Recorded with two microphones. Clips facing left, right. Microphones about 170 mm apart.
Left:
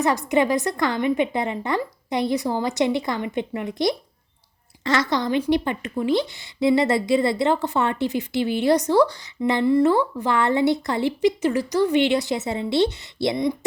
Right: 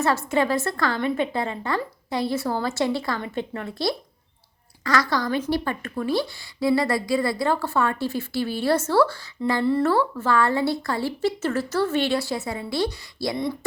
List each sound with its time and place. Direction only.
0.0 s a woman's voice: 15° left (ahead or behind)